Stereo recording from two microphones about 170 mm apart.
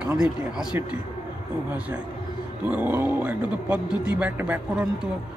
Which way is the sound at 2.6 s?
10° right (ahead or behind).